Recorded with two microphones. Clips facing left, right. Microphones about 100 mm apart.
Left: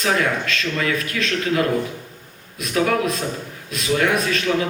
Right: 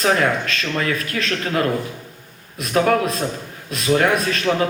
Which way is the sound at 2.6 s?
40° right (ahead or behind).